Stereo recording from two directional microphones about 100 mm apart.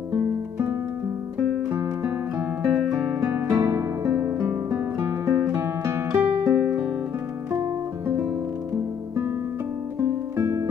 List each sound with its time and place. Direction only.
2.7 s guitar: 10° right (ahead or behind)
3.3 s music: 25° right (ahead or behind)
3.5 s music: 35° right (ahead or behind)
6.6 s music: 10° right (ahead or behind)
9.9 s music: 30° right (ahead or behind)